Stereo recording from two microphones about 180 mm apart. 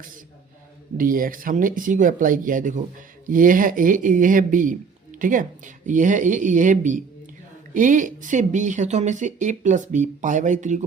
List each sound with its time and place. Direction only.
0.9 s speech: 50° right (ahead or behind)